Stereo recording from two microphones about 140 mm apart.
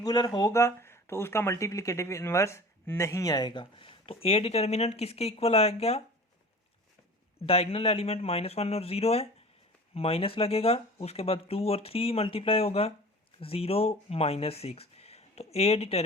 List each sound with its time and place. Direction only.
0.0 s speech: 30° left (ahead or behind); by 6.0 s 45° left (ahead or behind)
7.4 s speech: 45° left (ahead or behind)